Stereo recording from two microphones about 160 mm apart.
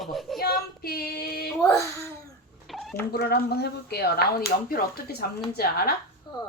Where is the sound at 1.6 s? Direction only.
20° left (ahead or behind).